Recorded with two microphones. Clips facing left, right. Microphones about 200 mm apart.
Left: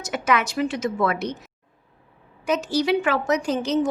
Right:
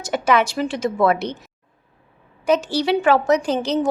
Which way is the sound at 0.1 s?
30° right (ahead or behind).